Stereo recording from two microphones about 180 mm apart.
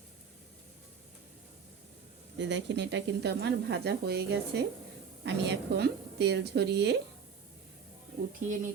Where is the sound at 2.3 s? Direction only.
75° right (ahead or behind).